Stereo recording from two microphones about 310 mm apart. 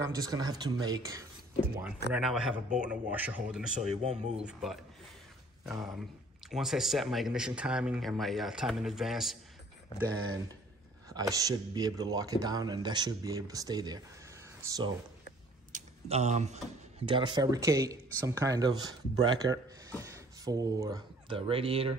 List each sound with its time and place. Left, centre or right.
0.0 s speech: centre
3.7 s speech: right
4.4 s speech: centre
11.1 s speech: centre
15.7 s speech: right